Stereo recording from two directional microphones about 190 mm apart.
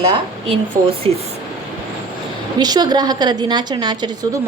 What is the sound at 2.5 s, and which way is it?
A woman's voice, 20° right (ahead or behind).